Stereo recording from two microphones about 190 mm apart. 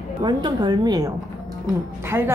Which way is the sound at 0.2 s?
25° right (ahead or behind).